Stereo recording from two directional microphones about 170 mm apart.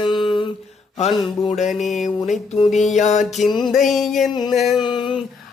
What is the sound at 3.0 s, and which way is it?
Music, 45° left (ahead or behind).